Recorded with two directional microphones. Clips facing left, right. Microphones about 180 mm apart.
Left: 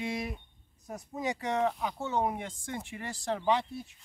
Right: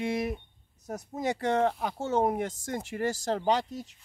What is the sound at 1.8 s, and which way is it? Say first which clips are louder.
Speech: right 4 dB; 50° right (ahead or behind).